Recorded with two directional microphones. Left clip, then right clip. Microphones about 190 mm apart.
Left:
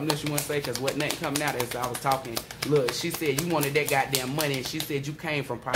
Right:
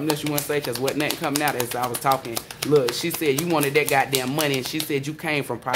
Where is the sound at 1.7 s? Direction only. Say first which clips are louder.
Right 5 dB; 40° right (ahead or behind).